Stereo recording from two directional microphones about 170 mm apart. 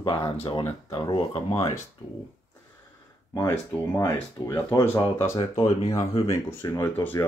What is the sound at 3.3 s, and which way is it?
Speech, 20° left (ahead or behind).